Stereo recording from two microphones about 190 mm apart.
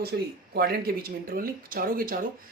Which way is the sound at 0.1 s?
60° right (ahead or behind).